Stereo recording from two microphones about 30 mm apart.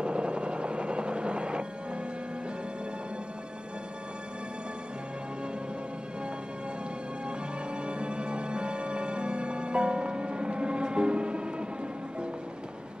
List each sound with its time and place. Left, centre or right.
0.0 s helicopter: right
7.2 s music: right